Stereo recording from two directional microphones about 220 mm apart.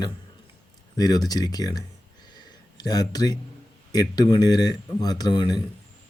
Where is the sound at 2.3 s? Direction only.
20° left (ahead or behind).